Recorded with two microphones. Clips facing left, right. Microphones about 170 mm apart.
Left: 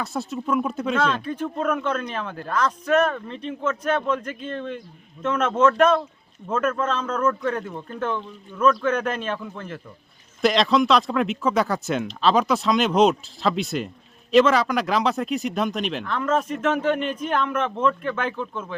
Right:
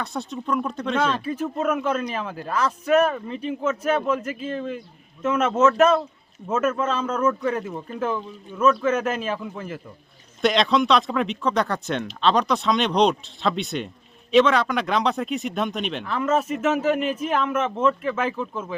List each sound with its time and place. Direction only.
0.0 s speech: 5° left (ahead or behind)
0.9 s speech: 5° right (ahead or behind)